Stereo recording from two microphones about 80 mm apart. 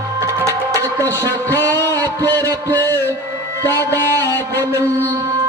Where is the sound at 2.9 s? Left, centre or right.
Left.